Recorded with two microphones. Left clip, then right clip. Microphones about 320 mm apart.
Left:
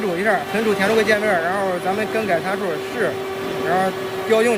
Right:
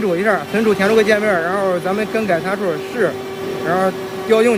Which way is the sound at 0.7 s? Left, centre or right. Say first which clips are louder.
Right 3 dB; right.